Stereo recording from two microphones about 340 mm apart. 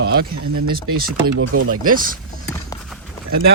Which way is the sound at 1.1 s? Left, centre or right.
Right.